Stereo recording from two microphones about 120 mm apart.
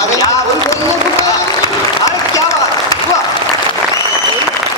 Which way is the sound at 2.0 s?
25° left (ahead or behind).